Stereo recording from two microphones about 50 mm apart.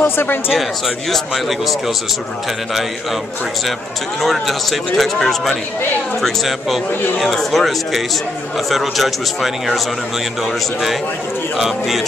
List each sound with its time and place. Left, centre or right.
0.0 s speech: left
0.6 s a man's voice: centre
4.2 s a man's voice: centre